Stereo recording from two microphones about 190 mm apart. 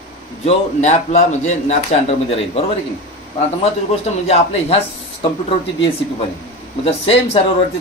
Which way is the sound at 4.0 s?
35° left (ahead or behind).